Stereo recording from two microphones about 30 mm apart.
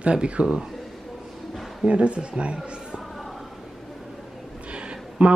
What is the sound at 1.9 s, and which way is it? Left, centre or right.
A man's voice, right.